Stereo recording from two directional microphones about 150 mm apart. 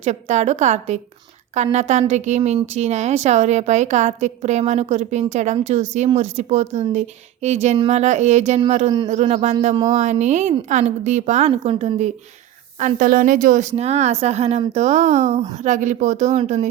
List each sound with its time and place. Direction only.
0.0 s a woman's voice: 50° right (ahead or behind)
13.0 s a woman's voice: 65° right (ahead or behind)